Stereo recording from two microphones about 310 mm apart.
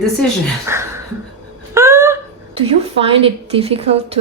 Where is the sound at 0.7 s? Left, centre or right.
Centre.